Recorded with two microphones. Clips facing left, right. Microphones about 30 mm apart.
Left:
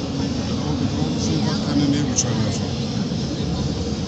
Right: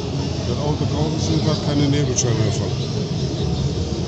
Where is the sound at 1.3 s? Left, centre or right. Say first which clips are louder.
Right 1 dB; right.